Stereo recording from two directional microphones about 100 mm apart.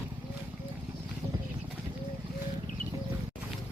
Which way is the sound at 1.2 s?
20° right (ahead or behind).